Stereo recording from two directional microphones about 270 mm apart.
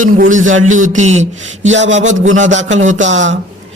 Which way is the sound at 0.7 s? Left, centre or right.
Right.